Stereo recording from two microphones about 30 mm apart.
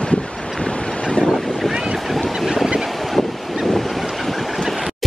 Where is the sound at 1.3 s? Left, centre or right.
Centre.